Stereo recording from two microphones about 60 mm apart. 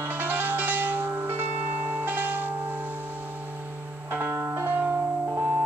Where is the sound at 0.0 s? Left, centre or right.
Right.